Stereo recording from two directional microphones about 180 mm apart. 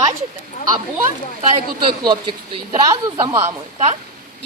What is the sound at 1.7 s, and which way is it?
Speech, 25° right (ahead or behind).